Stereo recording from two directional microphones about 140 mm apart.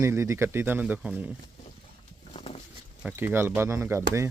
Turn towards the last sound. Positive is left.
turn(degrees=-20)  # may be behind; listen again after turning